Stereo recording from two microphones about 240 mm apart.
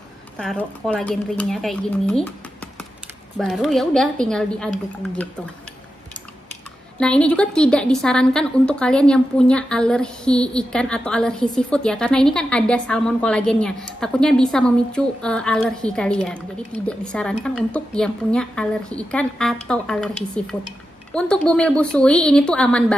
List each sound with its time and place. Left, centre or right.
0.4 s a woman's voice: centre
7.0 s a woman's voice: centre